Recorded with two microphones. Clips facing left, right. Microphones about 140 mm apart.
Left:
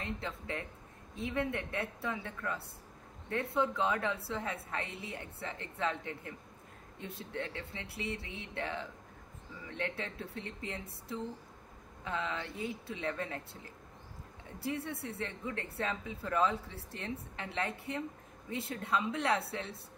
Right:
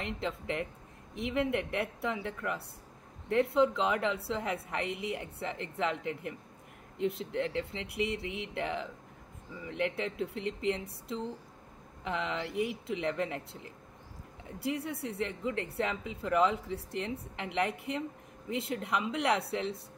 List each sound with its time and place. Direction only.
0.0 s speech: 20° right (ahead or behind)
12.0 s a sound: 20° right (ahead or behind)
12.8 s speech: 20° right (ahead or behind)
15.0 s speech: 20° right (ahead or behind)